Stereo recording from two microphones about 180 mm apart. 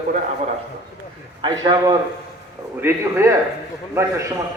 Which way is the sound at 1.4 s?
25° right (ahead or behind).